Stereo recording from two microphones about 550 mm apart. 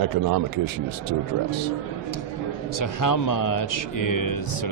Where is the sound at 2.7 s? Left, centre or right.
Left.